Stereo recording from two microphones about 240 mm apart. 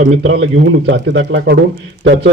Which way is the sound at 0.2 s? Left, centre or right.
Right.